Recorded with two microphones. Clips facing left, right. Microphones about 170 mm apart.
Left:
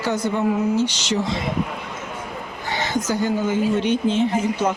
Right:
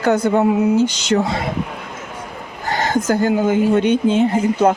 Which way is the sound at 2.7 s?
50° right (ahead or behind).